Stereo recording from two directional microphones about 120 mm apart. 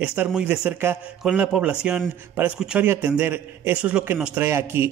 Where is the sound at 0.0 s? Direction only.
10° right (ahead or behind).